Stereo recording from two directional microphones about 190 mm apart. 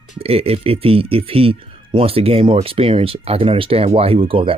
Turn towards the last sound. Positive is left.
turn(degrees=-30)  # may be behind; listen again after turning